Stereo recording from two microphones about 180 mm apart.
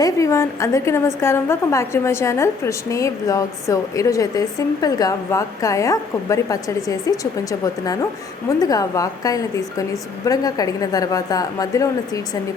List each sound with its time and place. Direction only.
0.0 s a woman's voice: 15° left (ahead or behind)
8.4 s a woman's voice: 20° left (ahead or behind)